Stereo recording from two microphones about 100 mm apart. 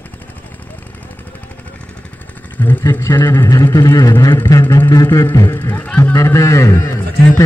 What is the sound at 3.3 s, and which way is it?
A man's voice, 35° left (ahead or behind).